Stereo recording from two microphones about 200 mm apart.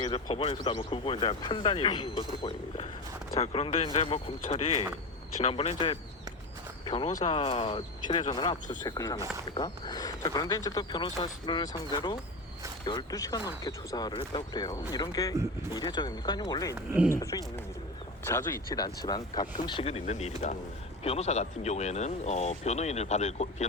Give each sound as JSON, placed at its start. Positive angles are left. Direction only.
{"t": 0.0, "sound": "speech", "side_deg": 25}